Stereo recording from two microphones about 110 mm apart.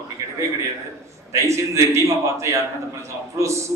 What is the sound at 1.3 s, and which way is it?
Speech, 25° right (ahead or behind).